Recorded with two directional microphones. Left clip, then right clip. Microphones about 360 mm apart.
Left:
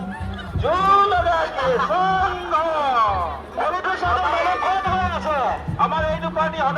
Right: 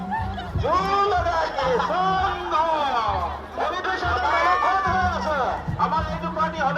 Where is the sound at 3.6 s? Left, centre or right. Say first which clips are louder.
Left 3 dB; centre.